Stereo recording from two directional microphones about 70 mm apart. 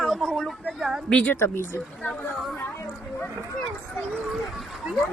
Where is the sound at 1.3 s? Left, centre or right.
Left.